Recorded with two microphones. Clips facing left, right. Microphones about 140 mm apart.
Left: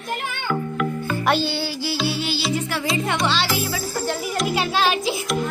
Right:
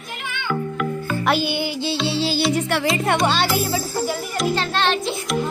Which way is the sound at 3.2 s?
50° right (ahead or behind).